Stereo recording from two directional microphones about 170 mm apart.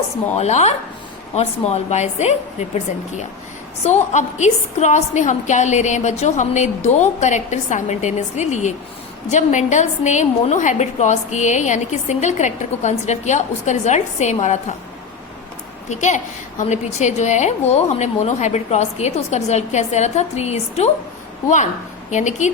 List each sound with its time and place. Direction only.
0.3 s a woman's voice: 40° left (ahead or behind)
3.8 s a woman's voice: 40° left (ahead or behind)
15.9 s a woman's voice: 45° left (ahead or behind)
22.1 s a woman's voice: 45° left (ahead or behind)